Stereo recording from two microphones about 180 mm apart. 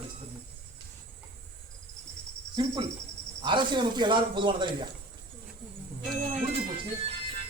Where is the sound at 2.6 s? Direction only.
25° right (ahead or behind).